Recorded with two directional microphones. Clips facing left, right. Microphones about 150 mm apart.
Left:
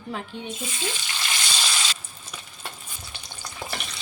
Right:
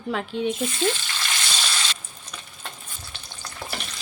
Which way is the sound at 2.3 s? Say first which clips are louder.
Even; 10° left (ahead or behind).